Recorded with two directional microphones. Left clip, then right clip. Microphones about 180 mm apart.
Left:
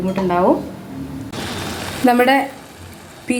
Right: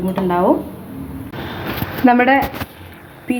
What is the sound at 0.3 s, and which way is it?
Speech, centre (ahead or behind).